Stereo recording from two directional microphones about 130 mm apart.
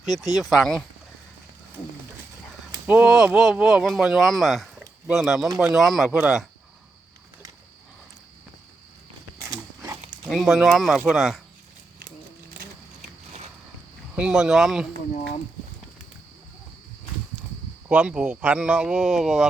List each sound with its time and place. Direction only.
0.3 s speech: centre (ahead or behind)
2.8 s speech: 10° right (ahead or behind)
9.4 s a sound: 20° right (ahead or behind)
10.2 s speech: centre (ahead or behind)
14.2 s speech: 5° right (ahead or behind)
17.8 s speech: 10° right (ahead or behind)